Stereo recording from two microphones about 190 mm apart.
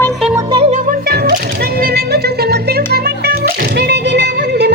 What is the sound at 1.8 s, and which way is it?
Music, 55° right (ahead or behind).